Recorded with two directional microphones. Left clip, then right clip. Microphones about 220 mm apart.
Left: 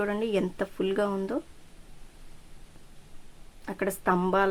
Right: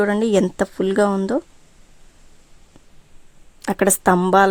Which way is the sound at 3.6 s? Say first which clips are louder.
Right 11 dB; 45° right (ahead or behind).